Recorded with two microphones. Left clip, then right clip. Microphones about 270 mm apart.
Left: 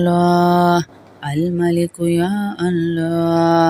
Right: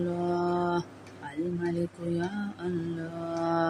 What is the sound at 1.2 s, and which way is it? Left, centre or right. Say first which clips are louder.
Speech: left 15 dB; left.